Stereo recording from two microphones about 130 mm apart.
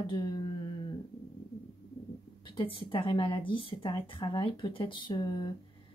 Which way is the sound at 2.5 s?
40° left (ahead or behind).